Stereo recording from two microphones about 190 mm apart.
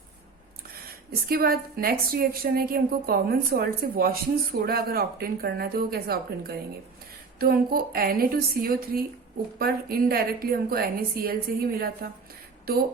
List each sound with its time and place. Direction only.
1.3 s a woman's voice: 50° right (ahead or behind)